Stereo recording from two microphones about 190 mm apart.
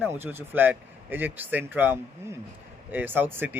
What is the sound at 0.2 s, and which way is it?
Speech, 10° right (ahead or behind).